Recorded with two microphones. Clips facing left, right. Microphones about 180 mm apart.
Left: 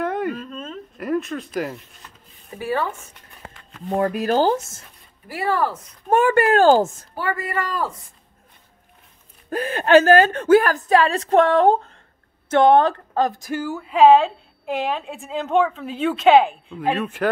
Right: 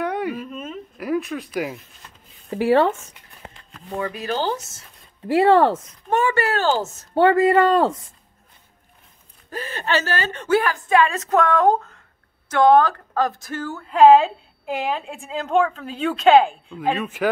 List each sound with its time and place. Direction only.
0.0 s a sound: centre (ahead or behind)
2.5 s speech: 80° right
3.9 s speech: 50° left (ahead or behind)
5.3 s speech: 80° right
6.0 s speech: 50° left (ahead or behind)
7.2 s speech: 90° right
9.5 s speech: 50° left (ahead or behind)
10.9 s a woman's voice: 35° left (ahead or behind); by 17.3 s 5° right (ahead or behind)